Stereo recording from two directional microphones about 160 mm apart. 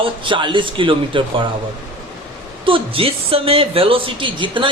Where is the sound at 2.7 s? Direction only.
35° right (ahead or behind).